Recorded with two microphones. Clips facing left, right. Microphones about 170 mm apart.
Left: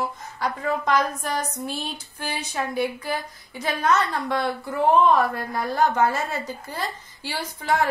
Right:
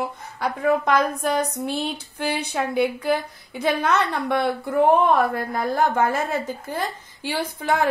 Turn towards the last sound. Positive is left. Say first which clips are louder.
# right 1 dB
turn(degrees=-55)  # may be behind; listen again after turning